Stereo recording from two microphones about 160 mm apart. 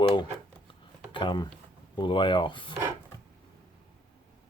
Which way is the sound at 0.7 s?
30° left (ahead or behind).